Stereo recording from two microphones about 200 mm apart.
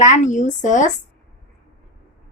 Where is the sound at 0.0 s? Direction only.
40° left (ahead or behind).